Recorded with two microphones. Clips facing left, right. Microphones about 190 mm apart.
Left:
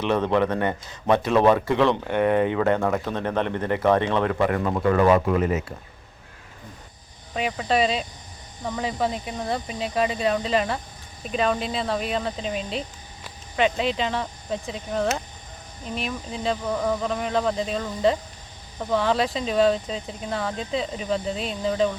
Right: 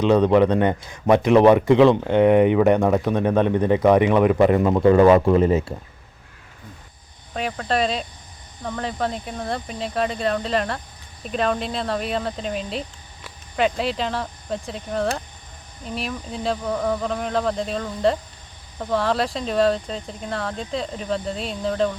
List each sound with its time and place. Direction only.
0.0 s a man's voice: 15° right (ahead or behind)
7.3 s speech: 5° left (ahead or behind)